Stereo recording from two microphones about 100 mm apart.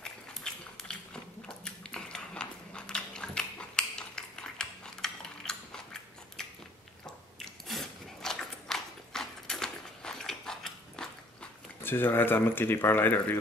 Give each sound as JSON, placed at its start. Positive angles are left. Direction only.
{"t": 0.0, "sound": "biting", "side_deg": 5}
{"t": 7.3, "sound": "biting", "side_deg": 0}
{"t": 11.8, "sound": "speech", "side_deg": 20}